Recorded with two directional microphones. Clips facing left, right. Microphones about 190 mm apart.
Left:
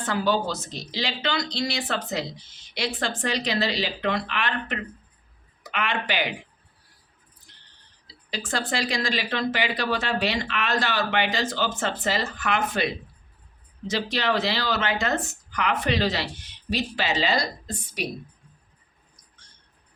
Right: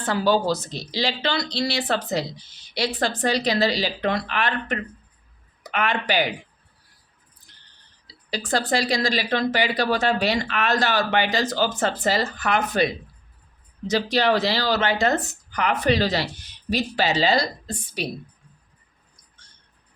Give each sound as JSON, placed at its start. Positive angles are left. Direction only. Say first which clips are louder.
{"t": 0.0, "sound": "speech", "louder": "right 3 dB", "side_deg": -35}
{"t": 8.3, "sound": "speech", "louder": "right 5 dB", "side_deg": -35}